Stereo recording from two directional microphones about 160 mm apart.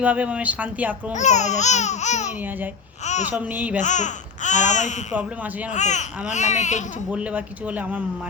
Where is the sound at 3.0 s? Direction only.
45° left (ahead or behind).